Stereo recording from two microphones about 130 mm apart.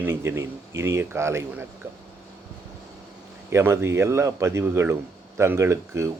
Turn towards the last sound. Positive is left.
turn(degrees=-20)  # may be behind; listen again after turning